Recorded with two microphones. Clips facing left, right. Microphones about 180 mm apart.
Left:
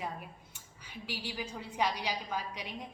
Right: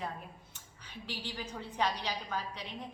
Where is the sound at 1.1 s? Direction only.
10° left (ahead or behind).